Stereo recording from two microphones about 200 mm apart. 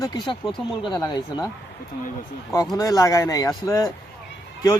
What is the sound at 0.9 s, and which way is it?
Speech, 20° left (ahead or behind).